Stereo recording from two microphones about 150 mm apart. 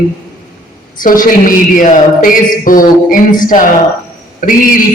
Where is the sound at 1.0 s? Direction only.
65° left (ahead or behind).